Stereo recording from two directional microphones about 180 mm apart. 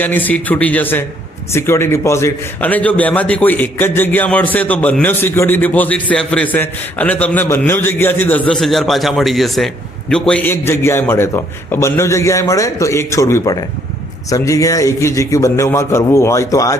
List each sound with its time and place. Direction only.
0.0 s a man's voice: 10° left (ahead or behind)